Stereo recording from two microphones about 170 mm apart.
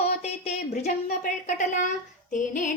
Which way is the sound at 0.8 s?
45° left (ahead or behind).